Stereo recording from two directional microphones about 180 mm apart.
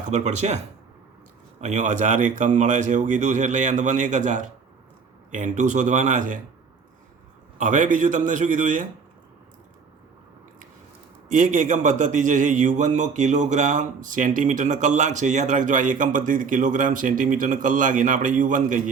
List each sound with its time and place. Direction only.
0.1 s speech: 40° right (ahead or behind)
1.6 s a man's voice: 40° right (ahead or behind)
7.6 s a man's voice: 45° right (ahead or behind)
11.3 s a man's voice: 45° right (ahead or behind)